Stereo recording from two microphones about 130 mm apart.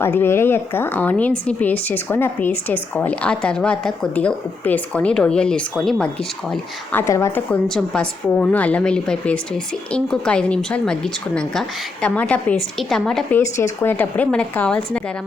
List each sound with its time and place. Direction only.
0.0 s speech: 15° left (ahead or behind)
6.9 s speech: 20° left (ahead or behind); by 13.2 s 5° left (ahead or behind)
13.3 s speech: 20° left (ahead or behind)